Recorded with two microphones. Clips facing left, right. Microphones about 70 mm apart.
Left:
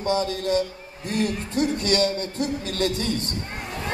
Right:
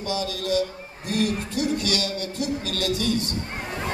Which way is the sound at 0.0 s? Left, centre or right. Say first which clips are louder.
Left 4 dB; left.